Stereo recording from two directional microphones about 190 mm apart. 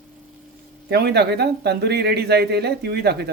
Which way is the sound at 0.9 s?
60° right (ahead or behind).